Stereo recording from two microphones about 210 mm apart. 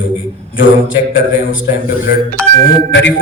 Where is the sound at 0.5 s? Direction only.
65° left (ahead or behind).